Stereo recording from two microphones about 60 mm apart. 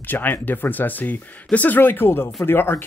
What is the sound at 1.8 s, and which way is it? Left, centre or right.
Speech, left.